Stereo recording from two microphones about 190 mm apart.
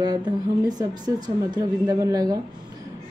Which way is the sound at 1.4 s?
20° right (ahead or behind).